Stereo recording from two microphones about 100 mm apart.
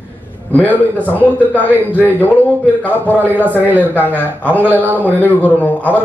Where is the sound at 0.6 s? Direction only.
15° left (ahead or behind).